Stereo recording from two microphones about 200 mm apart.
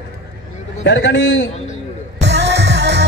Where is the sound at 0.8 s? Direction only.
65° left (ahead or behind).